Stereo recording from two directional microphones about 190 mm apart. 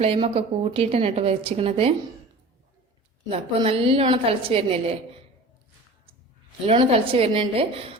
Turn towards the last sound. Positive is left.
turn(degrees=-30)  # may be behind; listen again after turning